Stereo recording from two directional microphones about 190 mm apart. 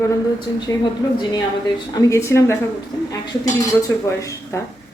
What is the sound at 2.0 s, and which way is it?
Speech, 15° left (ahead or behind).